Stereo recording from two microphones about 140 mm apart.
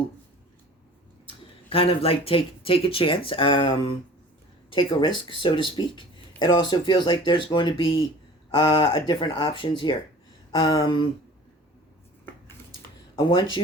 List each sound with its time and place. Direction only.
1.7 s speech: 40° left (ahead or behind)
13.1 s speech: 35° left (ahead or behind)